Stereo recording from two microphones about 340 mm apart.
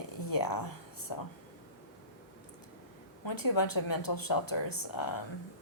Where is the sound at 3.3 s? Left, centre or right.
Left.